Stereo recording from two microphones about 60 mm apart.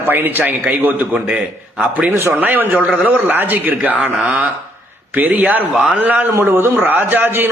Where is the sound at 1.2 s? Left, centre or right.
Centre.